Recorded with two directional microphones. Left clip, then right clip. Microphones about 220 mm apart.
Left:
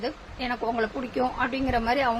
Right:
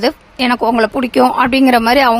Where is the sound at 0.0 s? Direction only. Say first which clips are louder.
Right 16 dB; 55° right (ahead or behind).